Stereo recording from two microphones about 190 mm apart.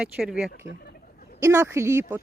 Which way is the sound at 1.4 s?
15° right (ahead or behind).